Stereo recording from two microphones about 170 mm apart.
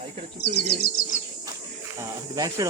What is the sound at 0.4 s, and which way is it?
Speech, 80° left.